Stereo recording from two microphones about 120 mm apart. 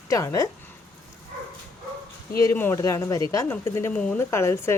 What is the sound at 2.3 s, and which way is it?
Speech, 20° left (ahead or behind).